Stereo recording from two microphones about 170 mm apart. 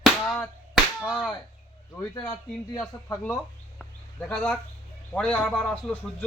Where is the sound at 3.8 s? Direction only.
5° left (ahead or behind).